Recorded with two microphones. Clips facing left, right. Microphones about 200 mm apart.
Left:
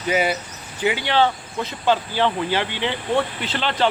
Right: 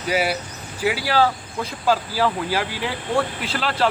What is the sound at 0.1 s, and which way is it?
Speech, 5° right (ahead or behind).